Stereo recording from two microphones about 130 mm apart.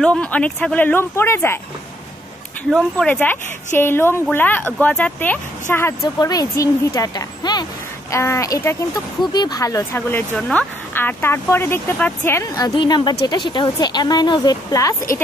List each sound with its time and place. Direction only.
0.0 s speech: 10° left (ahead or behind)
2.7 s speech: 10° left (ahead or behind)
6.1 s speech: 30° left (ahead or behind)
10.3 s a woman's voice: 10° left (ahead or behind); by 15.0 s 25° left (ahead or behind)